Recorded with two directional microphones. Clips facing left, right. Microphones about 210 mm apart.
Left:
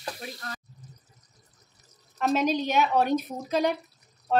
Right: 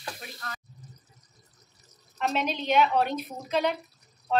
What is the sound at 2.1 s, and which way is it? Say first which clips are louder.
Speech: left 5 dB; 40° left (ahead or behind).